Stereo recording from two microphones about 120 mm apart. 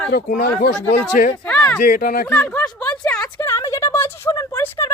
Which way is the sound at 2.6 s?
35° left (ahead or behind).